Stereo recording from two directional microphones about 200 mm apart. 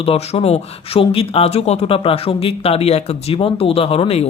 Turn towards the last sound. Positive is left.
turn(degrees=30)  # may be behind; listen again after turning